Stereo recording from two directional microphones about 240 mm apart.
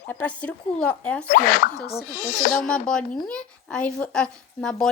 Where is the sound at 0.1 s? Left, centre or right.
Centre.